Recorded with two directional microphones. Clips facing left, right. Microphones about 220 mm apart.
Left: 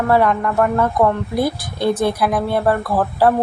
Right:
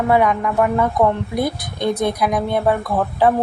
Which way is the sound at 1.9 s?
5° left (ahead or behind).